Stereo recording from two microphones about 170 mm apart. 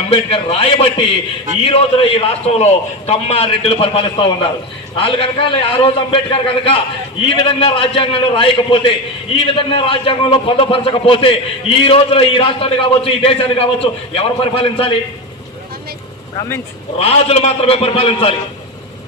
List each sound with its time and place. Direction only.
0.1 s a man's voice: 35° left (ahead or behind)
17.0 s a man's voice: 35° left (ahead or behind)